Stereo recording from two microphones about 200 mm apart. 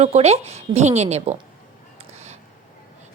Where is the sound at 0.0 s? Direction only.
30° right (ahead or behind).